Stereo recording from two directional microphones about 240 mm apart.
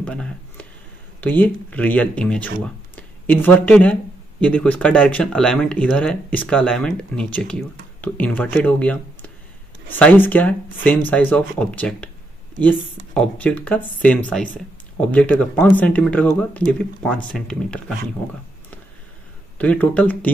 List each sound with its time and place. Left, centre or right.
0.0 s a sound: centre
1.2 s speech: centre
13.1 s speech: centre
19.6 s speech: centre